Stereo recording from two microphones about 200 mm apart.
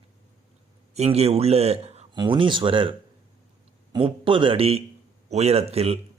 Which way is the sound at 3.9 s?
25° right (ahead or behind).